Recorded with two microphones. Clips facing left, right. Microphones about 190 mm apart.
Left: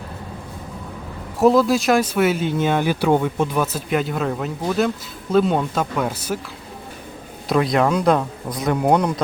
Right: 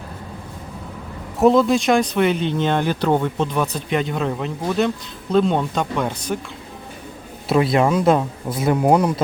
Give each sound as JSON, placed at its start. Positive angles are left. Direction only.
{"t": 1.4, "sound": "speech", "side_deg": 0}
{"t": 7.4, "sound": "speech", "side_deg": -5}